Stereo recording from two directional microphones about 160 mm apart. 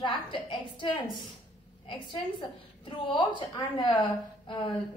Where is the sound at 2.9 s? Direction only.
30° left (ahead or behind).